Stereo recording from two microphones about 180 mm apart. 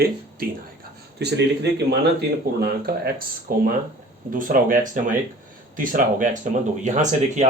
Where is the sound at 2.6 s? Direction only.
60° right (ahead or behind).